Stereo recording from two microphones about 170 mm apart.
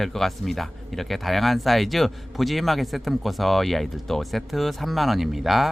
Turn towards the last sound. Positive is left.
turn(degrees=0)  # may be behind; listen again after turning